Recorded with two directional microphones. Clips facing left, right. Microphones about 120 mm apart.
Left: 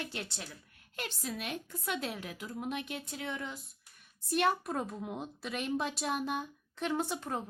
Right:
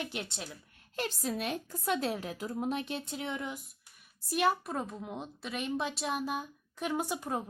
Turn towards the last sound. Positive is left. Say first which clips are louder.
# right 1 dB
turn(degrees=-10)  # may be behind; listen again after turning